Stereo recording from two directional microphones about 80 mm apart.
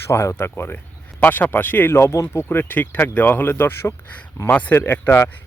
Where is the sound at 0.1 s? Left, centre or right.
Left.